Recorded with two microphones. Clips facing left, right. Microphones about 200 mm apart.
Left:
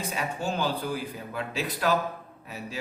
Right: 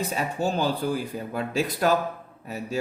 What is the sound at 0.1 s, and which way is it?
Speech, 40° right (ahead or behind).